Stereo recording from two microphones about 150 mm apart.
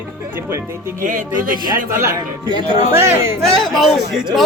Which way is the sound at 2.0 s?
20° right (ahead or behind).